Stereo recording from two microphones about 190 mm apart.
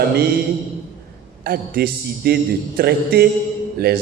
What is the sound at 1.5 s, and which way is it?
A man's voice, 50° right (ahead or behind).